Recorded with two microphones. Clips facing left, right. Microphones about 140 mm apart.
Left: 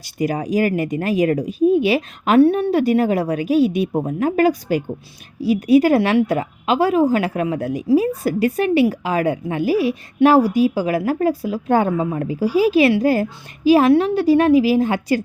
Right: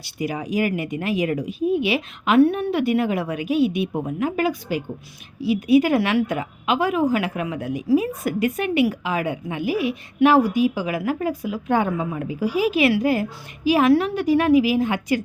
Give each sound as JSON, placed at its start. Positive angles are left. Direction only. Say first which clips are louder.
{"t": 0.0, "sound": "a woman's voice", "louder": "left 5 dB", "side_deg": 45}